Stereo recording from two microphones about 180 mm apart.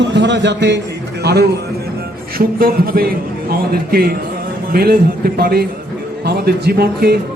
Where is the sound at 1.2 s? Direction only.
65° right (ahead or behind).